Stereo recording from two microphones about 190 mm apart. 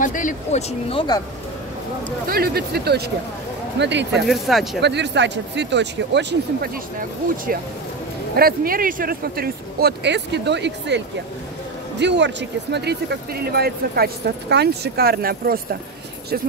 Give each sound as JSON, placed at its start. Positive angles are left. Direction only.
{"t": 0.0, "sound": "speech", "side_deg": 45}
{"t": 2.0, "sound": "speech", "side_deg": -50}
{"t": 3.8, "sound": "speech", "side_deg": -65}
{"t": 4.3, "sound": "speech", "side_deg": 0}
{"t": 4.7, "sound": "speech", "side_deg": -65}
{"t": 8.4, "sound": "speech", "side_deg": -50}
{"t": 12.0, "sound": "speech", "side_deg": -65}